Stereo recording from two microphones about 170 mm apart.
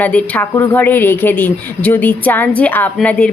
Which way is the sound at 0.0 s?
10° left (ahead or behind).